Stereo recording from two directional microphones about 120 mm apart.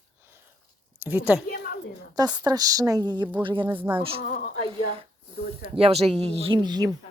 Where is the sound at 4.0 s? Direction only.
50° right (ahead or behind).